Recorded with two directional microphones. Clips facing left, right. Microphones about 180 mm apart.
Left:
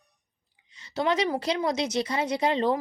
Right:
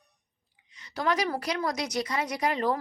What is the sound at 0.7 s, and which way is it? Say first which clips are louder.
Speech: left 2 dB; 25° left (ahead or behind).